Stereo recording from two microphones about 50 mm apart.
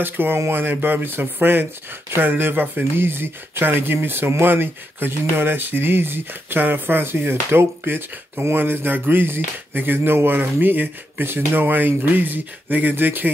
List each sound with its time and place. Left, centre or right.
0.0 s speech: right